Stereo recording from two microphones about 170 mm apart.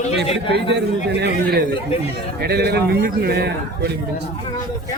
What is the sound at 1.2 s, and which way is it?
A man's voice, 75° right (ahead or behind).